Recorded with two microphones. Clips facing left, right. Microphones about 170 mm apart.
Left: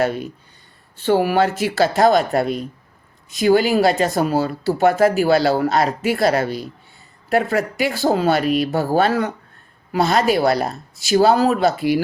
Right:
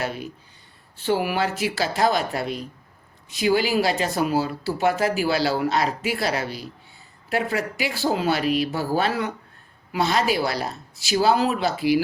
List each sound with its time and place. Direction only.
1.0 s speech: 45° left (ahead or behind)